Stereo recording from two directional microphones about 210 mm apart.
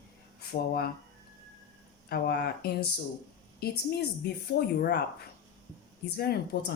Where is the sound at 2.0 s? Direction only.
50° left (ahead or behind).